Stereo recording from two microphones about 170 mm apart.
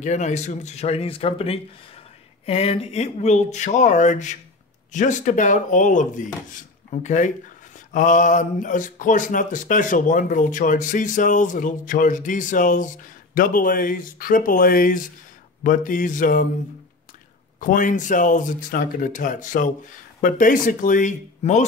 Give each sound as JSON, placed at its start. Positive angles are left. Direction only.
{"t": 0.0, "sound": "speech", "side_deg": 45}
{"t": 17.6, "sound": "speech", "side_deg": 50}